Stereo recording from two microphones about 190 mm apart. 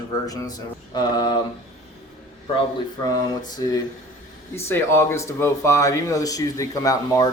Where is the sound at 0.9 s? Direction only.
20° left (ahead or behind).